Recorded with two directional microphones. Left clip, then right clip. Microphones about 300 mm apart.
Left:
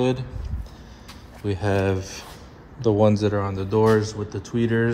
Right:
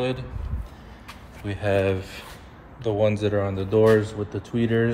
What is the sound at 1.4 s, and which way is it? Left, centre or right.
Speech, centre.